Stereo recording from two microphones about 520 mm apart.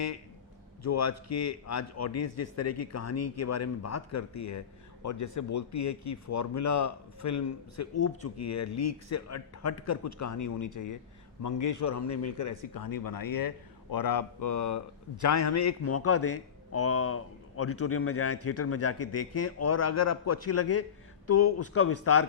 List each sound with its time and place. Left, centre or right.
0.8 s a man's voice: left